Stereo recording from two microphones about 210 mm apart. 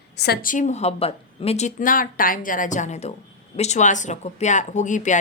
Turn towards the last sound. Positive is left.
turn(degrees=35)  # may be behind; listen again after turning